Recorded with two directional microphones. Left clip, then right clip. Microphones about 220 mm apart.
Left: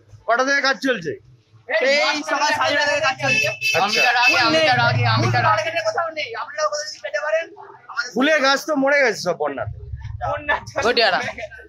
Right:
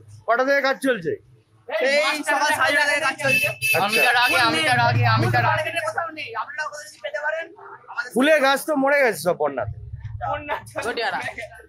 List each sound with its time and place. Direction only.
0.3 s speech: 5° right (ahead or behind)
4.0 s speech: 25° right (ahead or behind)
4.6 s speech: 10° right (ahead or behind)
5.5 s a woman's voice: 5° left (ahead or behind)
8.1 s speech: 15° right (ahead or behind)
10.3 s speech: 15° left (ahead or behind)
10.9 s speech: 45° left (ahead or behind)